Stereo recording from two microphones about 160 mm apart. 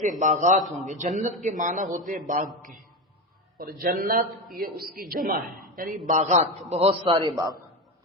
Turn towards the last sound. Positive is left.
turn(degrees=-30)  # may be behind; listen again after turning